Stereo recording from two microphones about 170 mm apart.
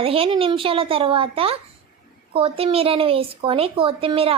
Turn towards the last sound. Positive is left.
turn(degrees=-35)  # may be behind; listen again after turning